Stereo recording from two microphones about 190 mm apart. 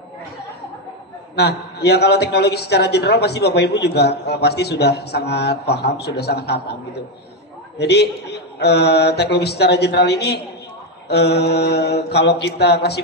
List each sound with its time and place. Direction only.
1.3 s a man's voice: 60° left (ahead or behind)
7.8 s a man's voice: 60° left (ahead or behind)